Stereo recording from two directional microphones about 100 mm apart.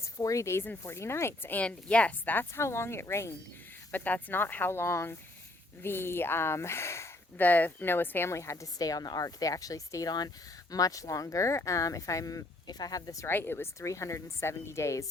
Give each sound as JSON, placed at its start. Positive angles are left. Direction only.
{"t": 0.0, "sound": "speech", "side_deg": 35}
{"t": 3.9, "sound": "speech", "side_deg": 15}
{"t": 7.4, "sound": "a woman's voice", "side_deg": 15}
{"t": 13.2, "sound": "speech", "side_deg": 25}